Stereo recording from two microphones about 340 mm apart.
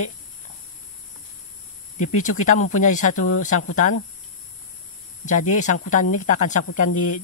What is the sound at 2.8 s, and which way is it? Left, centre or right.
Speech, left.